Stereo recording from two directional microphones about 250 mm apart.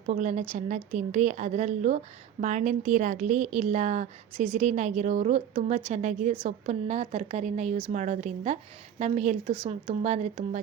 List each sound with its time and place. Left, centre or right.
0.1 s a woman's voice: right